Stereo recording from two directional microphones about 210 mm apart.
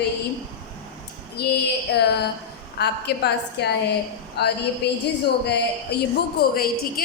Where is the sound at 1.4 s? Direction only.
50° left (ahead or behind).